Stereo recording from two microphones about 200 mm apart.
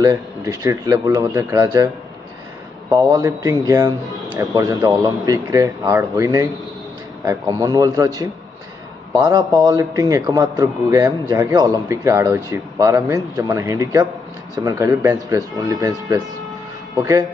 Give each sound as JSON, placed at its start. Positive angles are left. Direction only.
{"t": 0.0, "sound": "a man's voice", "side_deg": -15}
{"t": 2.9, "sound": "a man's voice", "side_deg": -15}